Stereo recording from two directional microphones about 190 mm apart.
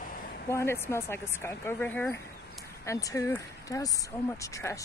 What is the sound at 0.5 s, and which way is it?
Speech, 15° left (ahead or behind).